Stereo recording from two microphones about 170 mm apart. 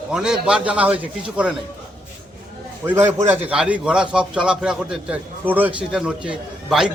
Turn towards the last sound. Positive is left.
turn(degrees=-5)  # may be behind; listen again after turning